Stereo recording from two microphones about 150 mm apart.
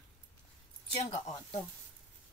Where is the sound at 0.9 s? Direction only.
40° left (ahead or behind).